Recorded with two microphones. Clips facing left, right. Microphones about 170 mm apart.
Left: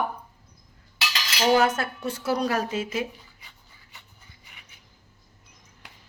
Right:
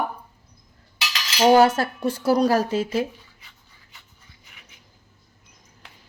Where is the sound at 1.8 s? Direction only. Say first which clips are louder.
Right 6 dB; 35° right (ahead or behind).